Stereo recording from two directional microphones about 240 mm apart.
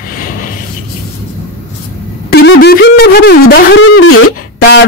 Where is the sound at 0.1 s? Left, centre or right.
Left.